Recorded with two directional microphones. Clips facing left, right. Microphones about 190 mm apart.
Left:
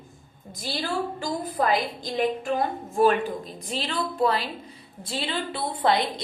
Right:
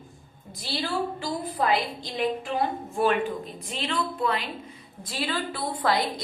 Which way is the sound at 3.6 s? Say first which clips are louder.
Even; 35° left (ahead or behind).